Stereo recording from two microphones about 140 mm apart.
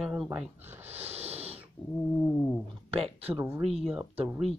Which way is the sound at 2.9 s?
45° right (ahead or behind).